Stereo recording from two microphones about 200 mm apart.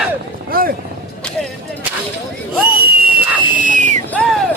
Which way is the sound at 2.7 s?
50° right (ahead or behind).